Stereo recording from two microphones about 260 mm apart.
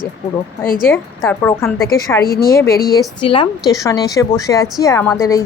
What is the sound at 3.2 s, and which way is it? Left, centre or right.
A woman's voice, centre.